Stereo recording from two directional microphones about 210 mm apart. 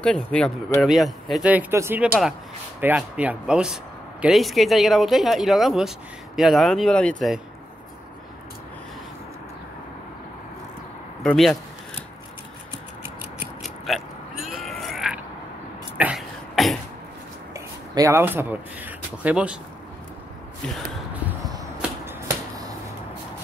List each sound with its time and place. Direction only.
0.0 s speech: 5° left (ahead or behind)
11.2 s speech: centre (ahead or behind)
13.4 s a sound: centre (ahead or behind)
16.0 s throat clearing: centre (ahead or behind)
17.6 s speech: 15° right (ahead or behind)
21.5 s arrow: 15° right (ahead or behind)